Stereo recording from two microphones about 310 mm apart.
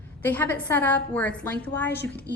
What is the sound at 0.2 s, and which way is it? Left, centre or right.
A woman's voice, centre.